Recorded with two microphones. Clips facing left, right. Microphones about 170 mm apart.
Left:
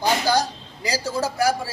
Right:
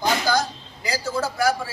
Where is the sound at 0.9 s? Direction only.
35° left (ahead or behind).